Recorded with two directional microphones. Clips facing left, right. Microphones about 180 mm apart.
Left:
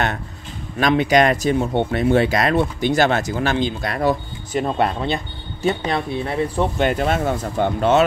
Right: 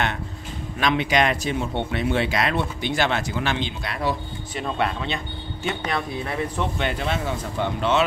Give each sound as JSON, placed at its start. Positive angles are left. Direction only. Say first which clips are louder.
{"t": 0.7, "sound": "speech", "louder": "left 5 dB", "side_deg": 45}